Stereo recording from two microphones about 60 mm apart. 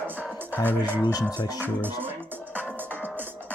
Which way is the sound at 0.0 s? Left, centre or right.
Right.